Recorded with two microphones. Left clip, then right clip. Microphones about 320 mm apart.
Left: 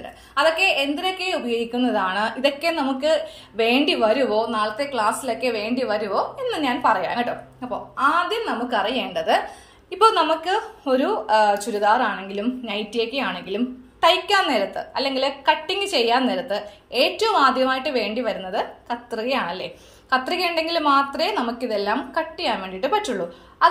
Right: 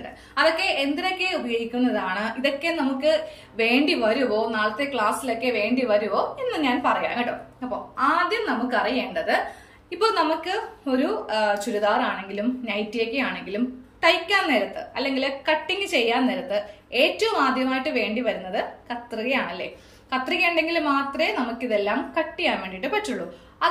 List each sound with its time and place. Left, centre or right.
0.3 s a woman's voice: centre
8.3 s a woman's voice: centre
22.6 s a woman's voice: centre
23.6 s a sound: centre